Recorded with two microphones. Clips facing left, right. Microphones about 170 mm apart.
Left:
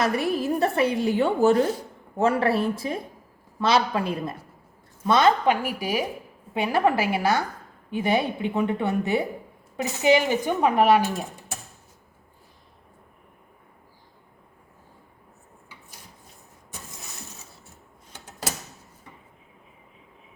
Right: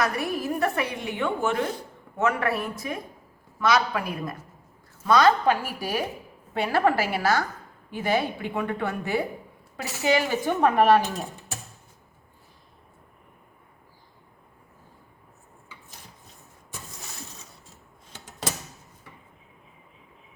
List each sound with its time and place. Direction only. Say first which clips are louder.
0.0 s a woman's voice: left 3 dB; 30° left (ahead or behind); by 11.0 s 10° left (ahead or behind)